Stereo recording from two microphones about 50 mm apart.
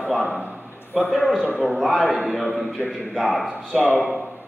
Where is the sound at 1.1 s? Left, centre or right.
Centre.